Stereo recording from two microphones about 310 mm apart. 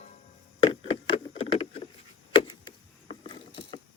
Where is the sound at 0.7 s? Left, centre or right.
Centre.